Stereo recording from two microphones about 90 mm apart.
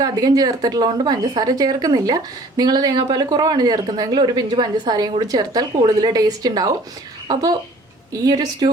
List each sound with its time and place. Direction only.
0.0 s a woman's voice: 45° right (ahead or behind)
8.1 s a woman's voice: 45° right (ahead or behind)